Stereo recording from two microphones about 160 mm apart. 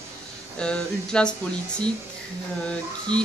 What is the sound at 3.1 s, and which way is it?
Speech, 30° right (ahead or behind).